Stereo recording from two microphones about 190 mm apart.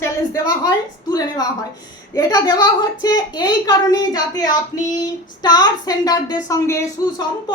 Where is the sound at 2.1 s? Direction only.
20° left (ahead or behind).